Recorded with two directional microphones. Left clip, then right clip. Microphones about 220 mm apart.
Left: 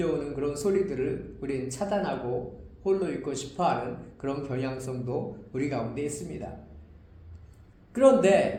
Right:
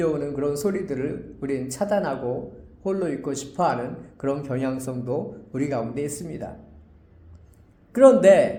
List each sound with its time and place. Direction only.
0.0 s a man's voice: 40° right (ahead or behind)
7.9 s a man's voice: 40° right (ahead or behind)